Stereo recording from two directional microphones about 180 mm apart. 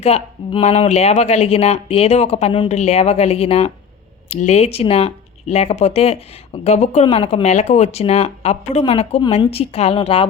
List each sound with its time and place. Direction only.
0.0 s speech: 35° left (ahead or behind)